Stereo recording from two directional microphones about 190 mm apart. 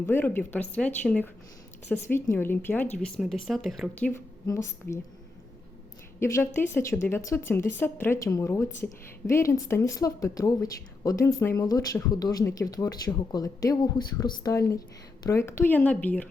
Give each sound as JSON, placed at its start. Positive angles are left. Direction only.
{"t": 0.0, "sound": "a woman's voice", "side_deg": 10}
{"t": 4.1, "sound": "a woman's voice", "side_deg": 15}
{"t": 6.1, "sound": "a woman's voice", "side_deg": 15}